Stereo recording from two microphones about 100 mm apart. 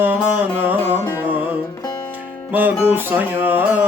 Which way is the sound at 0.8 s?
20° left (ahead or behind).